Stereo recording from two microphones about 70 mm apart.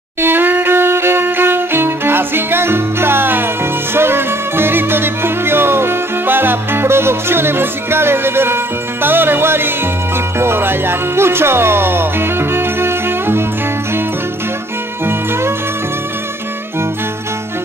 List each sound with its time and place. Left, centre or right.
0.2 s music: right